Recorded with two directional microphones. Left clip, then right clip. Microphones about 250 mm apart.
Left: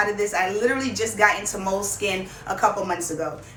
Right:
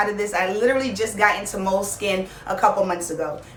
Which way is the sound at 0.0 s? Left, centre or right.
Centre.